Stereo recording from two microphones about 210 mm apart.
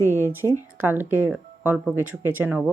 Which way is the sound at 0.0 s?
10° right (ahead or behind).